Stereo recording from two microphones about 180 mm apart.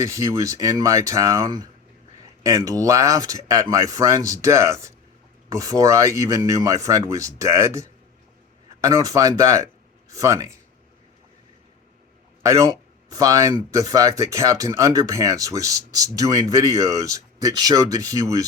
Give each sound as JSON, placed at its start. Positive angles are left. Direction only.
{"t": 0.0, "sound": "speech", "side_deg": -15}
{"t": 12.4, "sound": "speech", "side_deg": -15}